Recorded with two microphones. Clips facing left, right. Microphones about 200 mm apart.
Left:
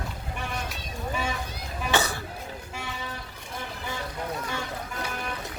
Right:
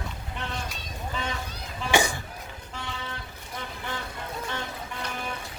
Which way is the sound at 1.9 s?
15° right (ahead or behind).